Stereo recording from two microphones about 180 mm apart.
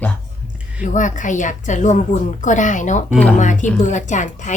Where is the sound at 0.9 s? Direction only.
45° left (ahead or behind).